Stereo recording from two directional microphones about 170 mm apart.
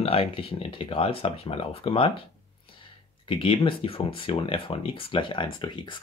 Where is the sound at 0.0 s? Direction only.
35° left (ahead or behind).